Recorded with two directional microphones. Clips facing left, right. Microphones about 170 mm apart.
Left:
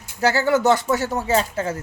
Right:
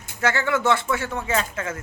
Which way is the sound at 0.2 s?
35° left (ahead or behind).